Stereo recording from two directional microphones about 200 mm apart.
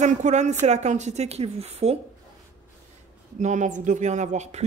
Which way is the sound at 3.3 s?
40° right (ahead or behind).